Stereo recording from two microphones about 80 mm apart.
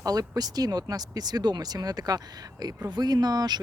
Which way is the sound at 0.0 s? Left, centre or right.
Right.